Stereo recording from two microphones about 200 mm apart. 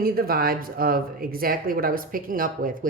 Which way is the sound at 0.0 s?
50° right (ahead or behind).